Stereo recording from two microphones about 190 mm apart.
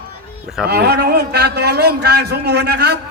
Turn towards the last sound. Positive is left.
turn(degrees=-60)  # may be behind; listen again after turning